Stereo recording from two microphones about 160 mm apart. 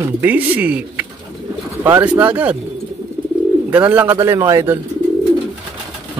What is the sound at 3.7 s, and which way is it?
Speech, 10° right (ahead or behind).